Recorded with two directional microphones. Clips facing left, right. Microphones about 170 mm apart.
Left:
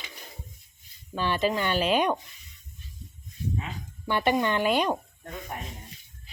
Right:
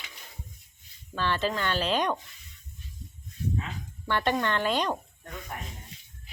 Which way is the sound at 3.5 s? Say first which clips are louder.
Even; 15° left (ahead or behind).